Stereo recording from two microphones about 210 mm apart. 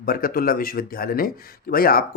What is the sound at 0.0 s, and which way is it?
Speech, 45° left (ahead or behind).